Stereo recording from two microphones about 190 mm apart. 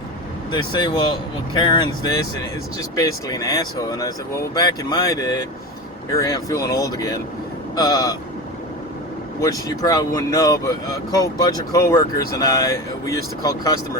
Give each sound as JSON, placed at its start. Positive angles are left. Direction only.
{"t": 0.5, "sound": "speech", "side_deg": 25}
{"t": 9.4, "sound": "speech", "side_deg": 20}